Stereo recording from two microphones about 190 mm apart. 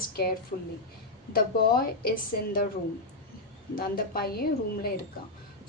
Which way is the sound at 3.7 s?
50° left (ahead or behind).